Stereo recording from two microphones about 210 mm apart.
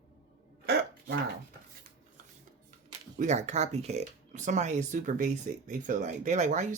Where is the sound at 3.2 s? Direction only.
35° right (ahead or behind).